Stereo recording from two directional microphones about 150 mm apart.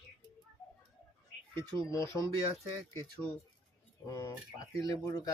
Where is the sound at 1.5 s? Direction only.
20° left (ahead or behind).